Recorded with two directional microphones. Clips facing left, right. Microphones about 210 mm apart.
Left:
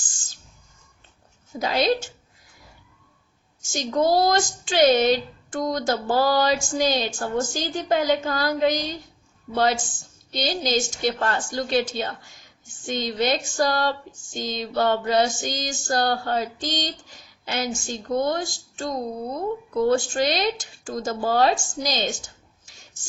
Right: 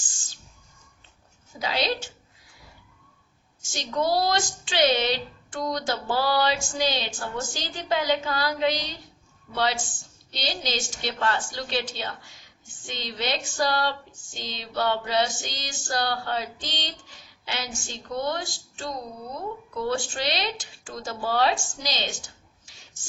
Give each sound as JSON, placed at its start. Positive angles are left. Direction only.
{"t": 1.5, "sound": "a woman's voice", "side_deg": 50}
{"t": 3.7, "sound": "a woman's voice", "side_deg": 45}
{"t": 10.3, "sound": "a woman's voice", "side_deg": 45}